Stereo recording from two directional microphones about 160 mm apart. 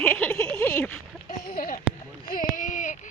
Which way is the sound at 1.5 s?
60° left (ahead or behind).